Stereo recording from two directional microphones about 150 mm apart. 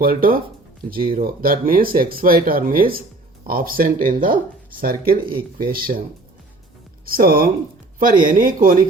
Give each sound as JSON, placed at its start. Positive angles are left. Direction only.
{"t": 0.0, "sound": "speech", "side_deg": -70}
{"t": 4.8, "sound": "speech", "side_deg": -75}
{"t": 7.0, "sound": "speech", "side_deg": -75}
{"t": 8.3, "sound": "speech", "side_deg": -65}